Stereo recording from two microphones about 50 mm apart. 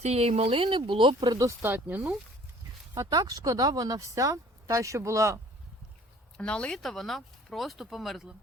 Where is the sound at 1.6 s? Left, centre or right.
Right.